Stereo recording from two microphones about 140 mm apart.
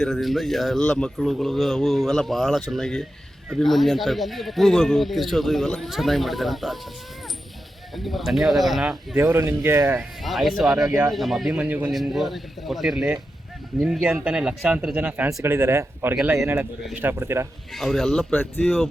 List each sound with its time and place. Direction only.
0.0 s speech: centre (ahead or behind)
7.9 s speech: centre (ahead or behind)
9.1 s speech: 20° right (ahead or behind)
10.0 s speech: centre (ahead or behind)
11.9 s speech: centre (ahead or behind); by 17.5 s 20° right (ahead or behind)
17.7 s speech: centre (ahead or behind)